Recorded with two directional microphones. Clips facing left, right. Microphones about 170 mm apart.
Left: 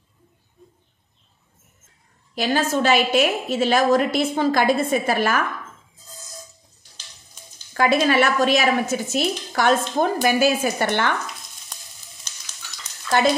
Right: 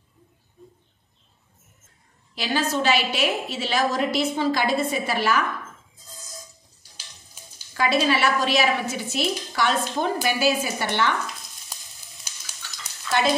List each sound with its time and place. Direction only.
2.3 s a woman's voice: 50° left (ahead or behind)
7.4 s a sound: 5° right (ahead or behind)
7.7 s a woman's voice: 50° left (ahead or behind)
12.3 s sizzle: 10° right (ahead or behind)